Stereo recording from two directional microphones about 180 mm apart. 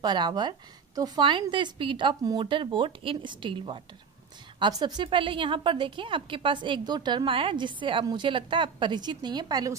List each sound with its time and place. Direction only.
0.0 s a woman's voice: 25° right (ahead or behind)